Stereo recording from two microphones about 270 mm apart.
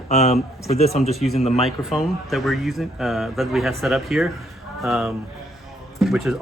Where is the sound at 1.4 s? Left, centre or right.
Left.